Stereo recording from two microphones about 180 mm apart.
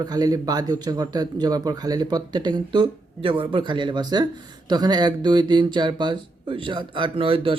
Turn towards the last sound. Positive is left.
turn(degrees=-30)  # may be behind; listen again after turning